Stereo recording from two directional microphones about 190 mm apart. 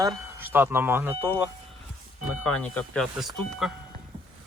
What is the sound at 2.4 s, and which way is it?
Speech, 5° left (ahead or behind).